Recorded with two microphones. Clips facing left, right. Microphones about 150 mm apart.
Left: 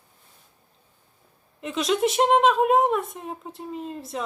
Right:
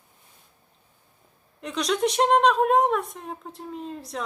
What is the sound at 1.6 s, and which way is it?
Speech, centre (ahead or behind).